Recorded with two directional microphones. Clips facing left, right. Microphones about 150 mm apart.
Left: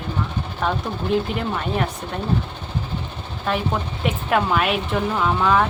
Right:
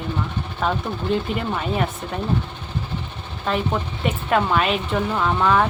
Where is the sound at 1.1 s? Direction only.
Centre (ahead or behind).